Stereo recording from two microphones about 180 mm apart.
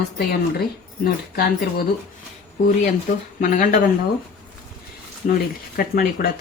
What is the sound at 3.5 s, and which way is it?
Speech, 45° left (ahead or behind).